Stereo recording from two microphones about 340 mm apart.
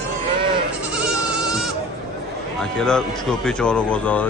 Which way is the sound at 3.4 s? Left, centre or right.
Centre.